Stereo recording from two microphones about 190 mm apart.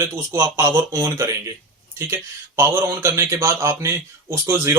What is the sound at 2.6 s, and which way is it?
Speech, 15° right (ahead or behind).